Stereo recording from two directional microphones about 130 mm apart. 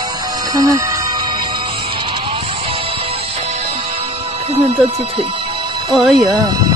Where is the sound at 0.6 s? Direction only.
25° right (ahead or behind).